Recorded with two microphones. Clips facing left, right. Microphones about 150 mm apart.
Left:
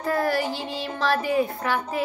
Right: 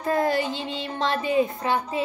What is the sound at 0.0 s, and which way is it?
Speech, 20° right (ahead or behind).